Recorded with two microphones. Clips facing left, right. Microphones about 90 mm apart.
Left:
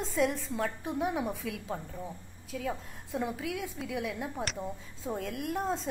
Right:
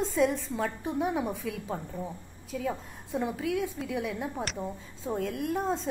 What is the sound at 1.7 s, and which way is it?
Speech, 15° right (ahead or behind).